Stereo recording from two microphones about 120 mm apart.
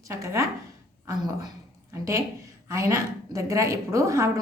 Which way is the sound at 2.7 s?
25° right (ahead or behind).